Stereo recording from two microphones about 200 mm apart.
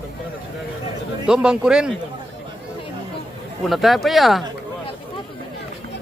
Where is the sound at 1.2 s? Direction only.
5° right (ahead or behind).